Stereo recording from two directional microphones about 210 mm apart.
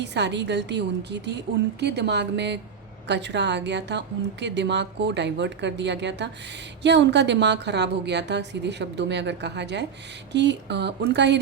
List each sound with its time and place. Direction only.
0.0 s a woman's voice: 55° right (ahead or behind)